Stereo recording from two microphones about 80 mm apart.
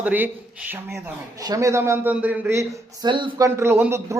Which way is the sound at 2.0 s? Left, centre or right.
Centre.